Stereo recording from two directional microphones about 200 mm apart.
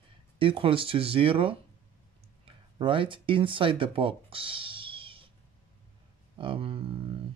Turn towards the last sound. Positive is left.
turn(degrees=-30)  # may be behind; listen again after turning